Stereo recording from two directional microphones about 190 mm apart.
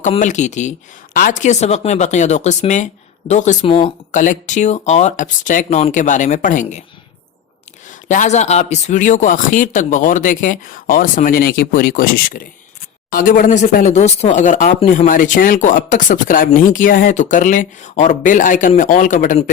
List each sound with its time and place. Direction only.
0.0 s speech: 40° left (ahead or behind)
8.0 s speech: 40° left (ahead or behind)